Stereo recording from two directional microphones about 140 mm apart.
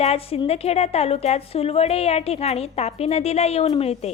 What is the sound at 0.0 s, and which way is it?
A woman's voice, 45° left (ahead or behind).